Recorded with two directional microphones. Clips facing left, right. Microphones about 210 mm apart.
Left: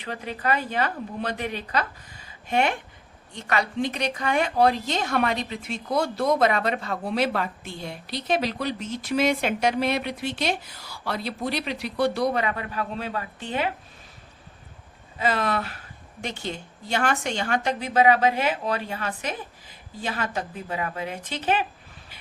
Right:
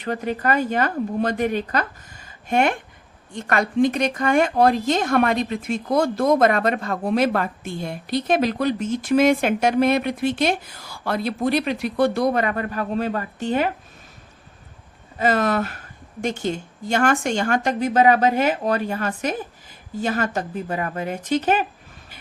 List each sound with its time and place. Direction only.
0.0 s speech: 45° right (ahead or behind)
15.2 s speech: 45° right (ahead or behind)